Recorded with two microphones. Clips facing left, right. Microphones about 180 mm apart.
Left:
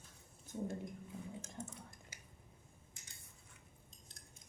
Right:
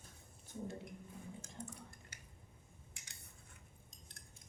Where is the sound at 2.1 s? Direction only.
60° right (ahead or behind).